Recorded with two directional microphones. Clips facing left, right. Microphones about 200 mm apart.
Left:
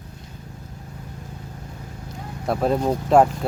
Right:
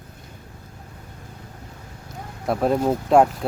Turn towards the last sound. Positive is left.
turn(degrees=0)  # may be behind; listen again after turning